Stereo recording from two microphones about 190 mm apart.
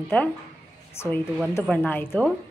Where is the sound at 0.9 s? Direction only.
15° left (ahead or behind).